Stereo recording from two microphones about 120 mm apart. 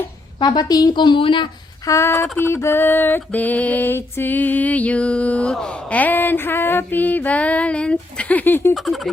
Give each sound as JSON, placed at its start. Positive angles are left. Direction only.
{"t": 0.3, "sound": "a woman's voice", "side_deg": 35}
{"t": 1.9, "sound": "a sound", "side_deg": 20}
{"t": 8.7, "sound": "speech", "side_deg": 0}